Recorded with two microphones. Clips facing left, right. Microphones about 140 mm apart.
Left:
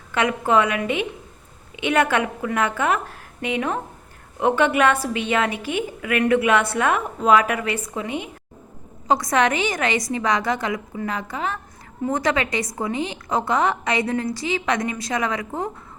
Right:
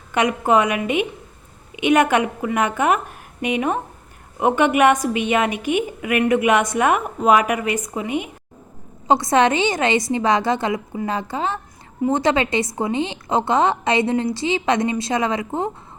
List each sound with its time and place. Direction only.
0.1 s a woman's voice: 15° right (ahead or behind)
9.0 s a woman's voice: 25° right (ahead or behind)